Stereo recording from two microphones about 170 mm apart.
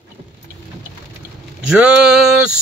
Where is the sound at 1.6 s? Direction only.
5° right (ahead or behind).